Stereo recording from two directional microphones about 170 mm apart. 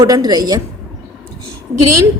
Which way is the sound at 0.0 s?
20° right (ahead or behind).